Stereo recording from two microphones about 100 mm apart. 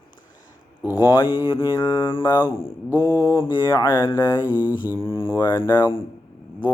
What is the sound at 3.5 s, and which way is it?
Speech, 45° left (ahead or behind).